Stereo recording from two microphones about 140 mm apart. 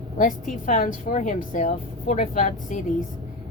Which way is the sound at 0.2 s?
75° left (ahead or behind).